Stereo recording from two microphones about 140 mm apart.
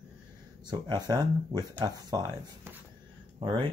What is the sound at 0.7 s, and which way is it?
Speech, 30° right (ahead or behind).